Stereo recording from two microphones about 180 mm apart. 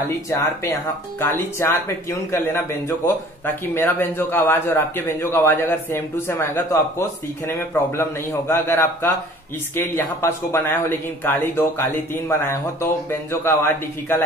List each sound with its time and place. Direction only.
0.3 s a man's voice: 15° left (ahead or behind)